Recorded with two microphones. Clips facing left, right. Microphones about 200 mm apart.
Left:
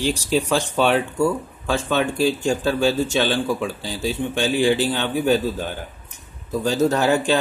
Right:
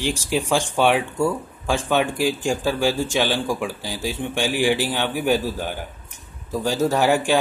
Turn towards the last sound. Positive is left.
turn(degrees=-10)  # may be behind; listen again after turning